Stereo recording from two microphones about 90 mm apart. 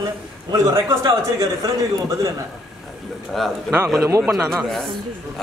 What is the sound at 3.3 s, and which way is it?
A man's voice, centre (ahead or behind).